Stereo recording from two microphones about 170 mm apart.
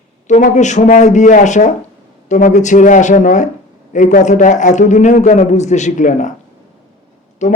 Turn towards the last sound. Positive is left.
turn(degrees=45)  # may be behind; listen again after turning